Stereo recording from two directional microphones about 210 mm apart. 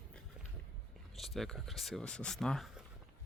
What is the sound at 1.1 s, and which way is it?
Speech, centre (ahead or behind).